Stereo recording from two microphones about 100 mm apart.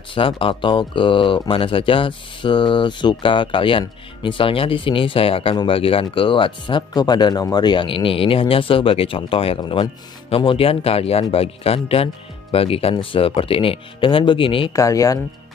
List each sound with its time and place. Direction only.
0.1 s speech: 60° left (ahead or behind)
6.9 s speech: 45° left (ahead or behind); by 9.6 s 65° left (ahead or behind)
9.6 s speech: 55° left (ahead or behind); by 12.9 s 75° left (ahead or behind)
12.9 s speech: 60° left (ahead or behind)
14.7 s speech: 35° left (ahead or behind)